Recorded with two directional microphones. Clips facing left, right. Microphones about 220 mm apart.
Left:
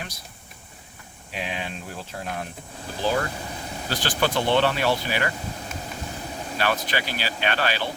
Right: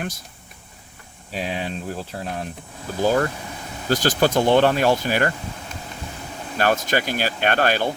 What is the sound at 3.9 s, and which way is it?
Speech, 45° right (ahead or behind).